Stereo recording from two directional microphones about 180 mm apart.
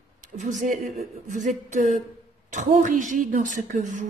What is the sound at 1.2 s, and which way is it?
A woman's voice, 45° right (ahead or behind).